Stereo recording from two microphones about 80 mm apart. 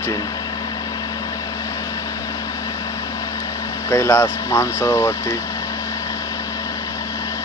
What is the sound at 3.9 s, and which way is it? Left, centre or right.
Speech, left.